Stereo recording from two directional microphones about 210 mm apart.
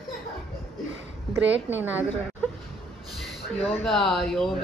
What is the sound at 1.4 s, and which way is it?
Speech, 60° right (ahead or behind).